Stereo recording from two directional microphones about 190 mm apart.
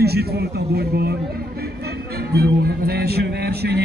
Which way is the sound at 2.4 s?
55° right (ahead or behind).